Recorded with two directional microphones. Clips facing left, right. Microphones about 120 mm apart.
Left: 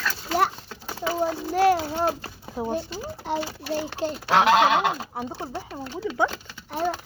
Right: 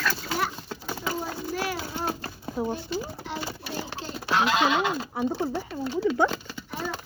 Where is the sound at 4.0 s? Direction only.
75° left (ahead or behind).